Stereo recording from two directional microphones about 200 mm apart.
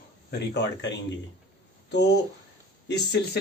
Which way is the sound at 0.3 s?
60° left (ahead or behind).